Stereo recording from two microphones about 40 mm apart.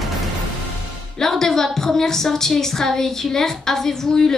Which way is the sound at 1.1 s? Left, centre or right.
Centre.